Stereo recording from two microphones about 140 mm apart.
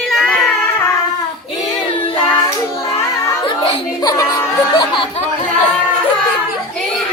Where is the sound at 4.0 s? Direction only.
25° left (ahead or behind).